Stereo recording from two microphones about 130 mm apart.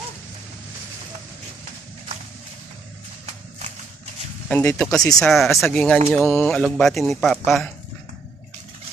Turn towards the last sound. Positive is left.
turn(degrees=0)  # may be behind; listen again after turning